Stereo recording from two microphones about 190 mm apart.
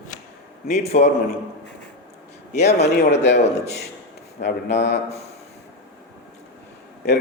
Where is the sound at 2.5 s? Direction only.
35° left (ahead or behind).